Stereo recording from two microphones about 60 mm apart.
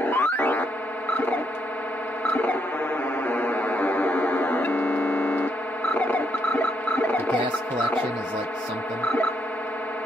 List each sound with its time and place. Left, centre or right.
0.0 s cacophony: left
1.1 s a sound: left
3.3 s music: left